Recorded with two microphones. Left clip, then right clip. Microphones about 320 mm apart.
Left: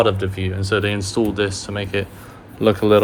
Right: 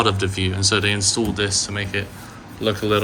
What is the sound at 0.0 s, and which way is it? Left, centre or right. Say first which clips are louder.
Speech: left 2 dB; centre.